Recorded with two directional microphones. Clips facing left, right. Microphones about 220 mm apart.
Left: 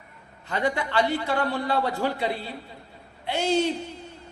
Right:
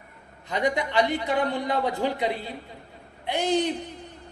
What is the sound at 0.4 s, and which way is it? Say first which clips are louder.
A man's voice: right 1 dB; 15° right (ahead or behind).